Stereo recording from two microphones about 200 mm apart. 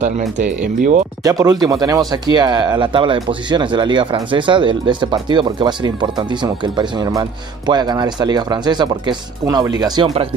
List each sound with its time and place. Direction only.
0.2 s speech: 5° right (ahead or behind)
0.7 s speech: 40° right (ahead or behind)
1.2 s speech: 20° right (ahead or behind)